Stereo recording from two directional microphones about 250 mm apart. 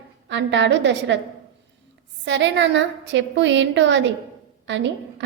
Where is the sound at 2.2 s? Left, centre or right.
Right.